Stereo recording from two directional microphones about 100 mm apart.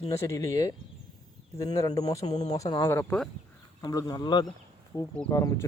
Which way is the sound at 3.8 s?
40° left (ahead or behind).